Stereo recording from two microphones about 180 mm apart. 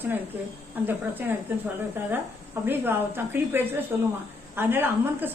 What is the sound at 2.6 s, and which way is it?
A woman's voice, 10° right (ahead or behind).